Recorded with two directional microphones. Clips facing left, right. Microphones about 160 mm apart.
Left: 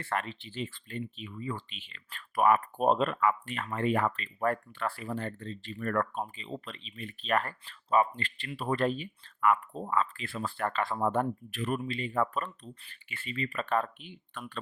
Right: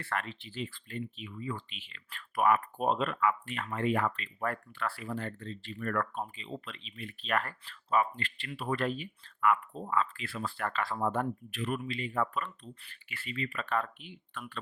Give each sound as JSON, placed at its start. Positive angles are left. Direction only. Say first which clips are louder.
{"t": 0.0, "sound": "speech", "louder": "left 3 dB", "side_deg": 25}
{"t": 4.7, "sound": "speech", "louder": "left 2 dB", "side_deg": 25}